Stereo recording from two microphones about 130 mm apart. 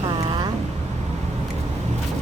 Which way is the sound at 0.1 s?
35° right (ahead or behind).